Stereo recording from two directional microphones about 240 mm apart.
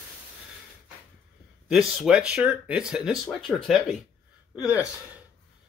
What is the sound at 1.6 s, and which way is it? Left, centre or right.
Speech, centre.